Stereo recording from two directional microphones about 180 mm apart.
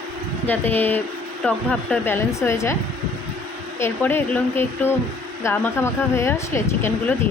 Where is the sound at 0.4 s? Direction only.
10° left (ahead or behind).